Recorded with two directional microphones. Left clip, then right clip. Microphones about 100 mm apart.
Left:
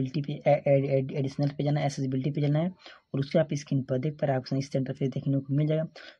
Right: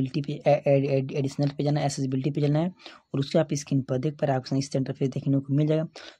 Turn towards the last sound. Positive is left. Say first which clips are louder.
# right 3 dB
turn(degrees=-45)  # may be behind; listen again after turning